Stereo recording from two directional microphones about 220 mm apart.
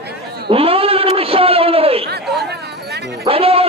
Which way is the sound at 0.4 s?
25° right (ahead or behind).